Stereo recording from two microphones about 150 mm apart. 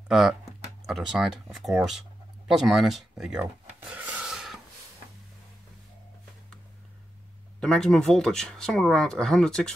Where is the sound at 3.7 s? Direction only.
10° right (ahead or behind).